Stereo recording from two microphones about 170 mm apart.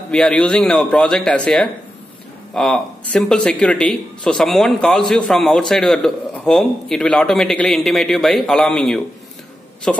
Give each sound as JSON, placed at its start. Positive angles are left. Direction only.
{"t": 0.1, "sound": "speech", "side_deg": 5}